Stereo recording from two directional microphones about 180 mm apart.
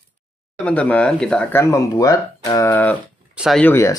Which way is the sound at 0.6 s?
5° left (ahead or behind).